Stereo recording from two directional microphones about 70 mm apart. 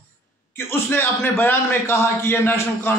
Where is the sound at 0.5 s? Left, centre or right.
Left.